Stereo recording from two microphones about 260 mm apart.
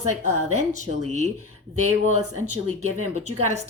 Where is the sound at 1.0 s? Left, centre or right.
Right.